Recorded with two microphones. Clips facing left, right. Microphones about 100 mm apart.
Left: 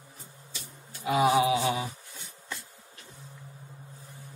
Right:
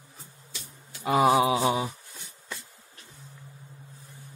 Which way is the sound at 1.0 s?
40° right (ahead or behind).